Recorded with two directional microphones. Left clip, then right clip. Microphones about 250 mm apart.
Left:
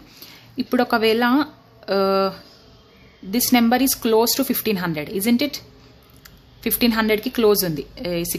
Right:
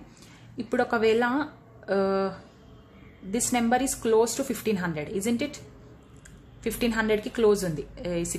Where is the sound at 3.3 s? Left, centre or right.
Centre.